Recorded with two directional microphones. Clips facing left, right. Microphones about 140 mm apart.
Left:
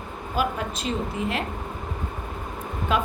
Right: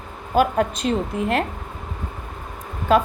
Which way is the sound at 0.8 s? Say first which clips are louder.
Right 4 dB; 60° right (ahead or behind).